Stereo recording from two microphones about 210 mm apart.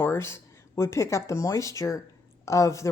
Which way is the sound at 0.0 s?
10° left (ahead or behind).